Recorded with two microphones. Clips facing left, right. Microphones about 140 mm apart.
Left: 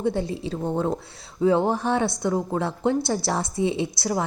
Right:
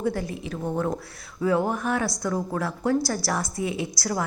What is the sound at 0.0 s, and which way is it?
Speech, 25° left (ahead or behind).